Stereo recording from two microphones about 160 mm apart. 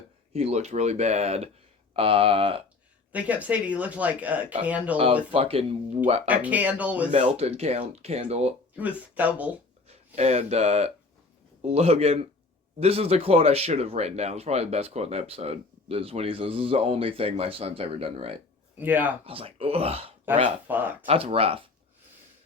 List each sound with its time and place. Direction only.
0.3 s speech: 40° right (ahead or behind)
3.1 s speech: 10° right (ahead or behind)
5.3 s speech: 35° right (ahead or behind)
6.2 s speech: 10° right (ahead or behind)
7.1 s speech: 40° right (ahead or behind)
8.7 s speech: 10° right (ahead or behind)
10.2 s speech: 40° right (ahead or behind)
18.8 s speech: 10° right (ahead or behind)
19.2 s speech: 35° right (ahead or behind)
20.7 s speech: 10° right (ahead or behind)
21.1 s speech: 40° right (ahead or behind)